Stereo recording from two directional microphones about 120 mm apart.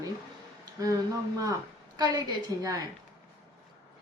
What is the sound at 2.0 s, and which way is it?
Speech, 35° right (ahead or behind).